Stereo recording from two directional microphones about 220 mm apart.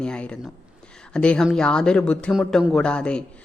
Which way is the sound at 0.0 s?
5° left (ahead or behind).